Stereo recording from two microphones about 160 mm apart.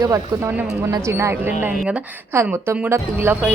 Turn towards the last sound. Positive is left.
turn(degrees=-10)  # may be behind; listen again after turning